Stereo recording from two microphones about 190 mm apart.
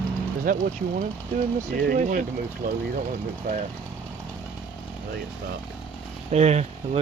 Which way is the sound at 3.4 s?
50° right (ahead or behind).